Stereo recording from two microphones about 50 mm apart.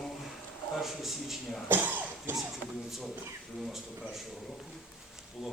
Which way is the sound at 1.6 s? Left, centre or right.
Right.